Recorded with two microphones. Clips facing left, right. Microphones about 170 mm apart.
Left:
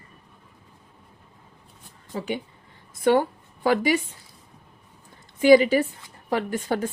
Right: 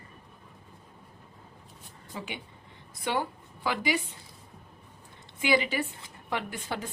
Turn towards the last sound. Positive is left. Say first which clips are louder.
# left 10 dB
turn(degrees=45)  # may be behind; listen again after turning